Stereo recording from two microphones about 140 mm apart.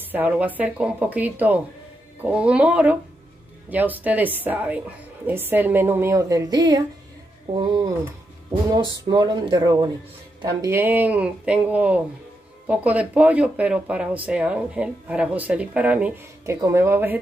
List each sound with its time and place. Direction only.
0.0 s speech: 15° right (ahead or behind); by 7.9 s 35° right (ahead or behind)
9.1 s speech: 30° right (ahead or behind)